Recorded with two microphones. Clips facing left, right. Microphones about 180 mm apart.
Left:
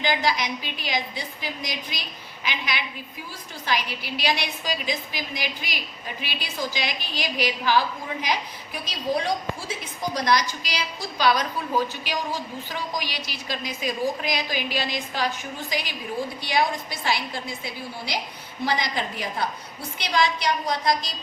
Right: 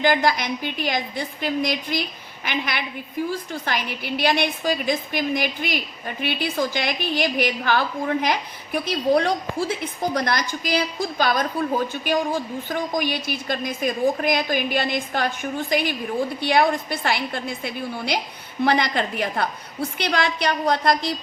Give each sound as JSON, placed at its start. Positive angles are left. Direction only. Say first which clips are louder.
{"t": 0.0, "sound": "a woman's voice", "louder": "right 5 dB", "side_deg": -55}